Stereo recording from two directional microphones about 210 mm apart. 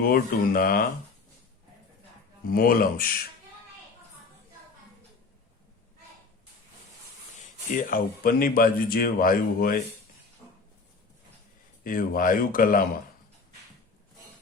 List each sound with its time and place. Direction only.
0.0 s speech: 45° left (ahead or behind)
2.5 s speech: 45° left (ahead or behind)
7.8 s speech: 40° left (ahead or behind)
11.8 s speech: 40° left (ahead or behind)